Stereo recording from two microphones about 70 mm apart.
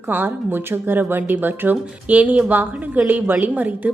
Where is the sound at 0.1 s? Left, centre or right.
Right.